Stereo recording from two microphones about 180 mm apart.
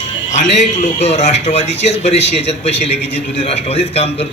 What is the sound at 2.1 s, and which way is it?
Speech, 75° left (ahead or behind).